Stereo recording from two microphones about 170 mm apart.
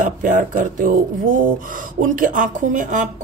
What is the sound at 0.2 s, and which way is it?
Speech, 50° right (ahead or behind).